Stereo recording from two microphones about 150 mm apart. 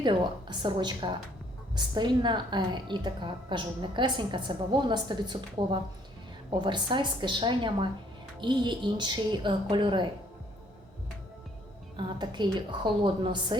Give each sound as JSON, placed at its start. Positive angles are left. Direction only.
{"t": 0.0, "sound": "a woman's voice", "side_deg": -30}
{"t": 11.9, "sound": "a woman's voice", "side_deg": -30}